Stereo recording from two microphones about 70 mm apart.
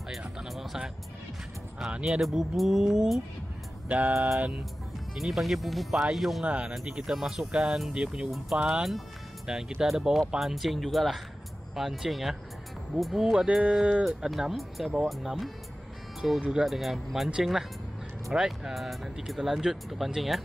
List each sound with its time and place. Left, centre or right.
0.4 s speech: centre
2.1 s speech: centre
5.1 s speech: centre
6.4 s speech: centre